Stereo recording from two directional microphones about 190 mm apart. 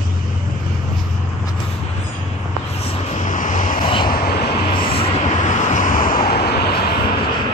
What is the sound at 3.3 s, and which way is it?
Vehicle, 40° left (ahead or behind).